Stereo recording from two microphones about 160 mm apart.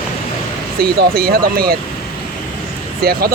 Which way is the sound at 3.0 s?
70° right (ahead or behind).